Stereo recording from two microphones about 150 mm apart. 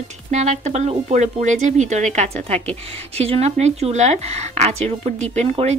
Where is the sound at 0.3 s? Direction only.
50° right (ahead or behind).